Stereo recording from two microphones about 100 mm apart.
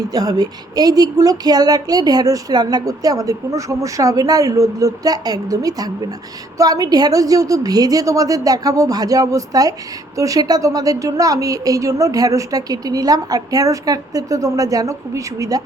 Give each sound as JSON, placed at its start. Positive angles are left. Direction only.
{"t": 0.1, "sound": "speech", "side_deg": -40}